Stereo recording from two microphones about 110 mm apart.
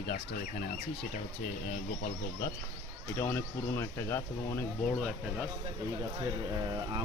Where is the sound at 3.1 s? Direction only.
25° left (ahead or behind).